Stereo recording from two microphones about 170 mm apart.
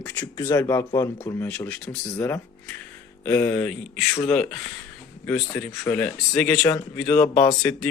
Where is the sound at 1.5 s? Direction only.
10° left (ahead or behind).